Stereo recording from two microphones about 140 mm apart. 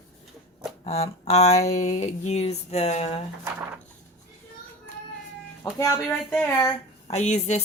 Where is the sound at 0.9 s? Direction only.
50° left (ahead or behind).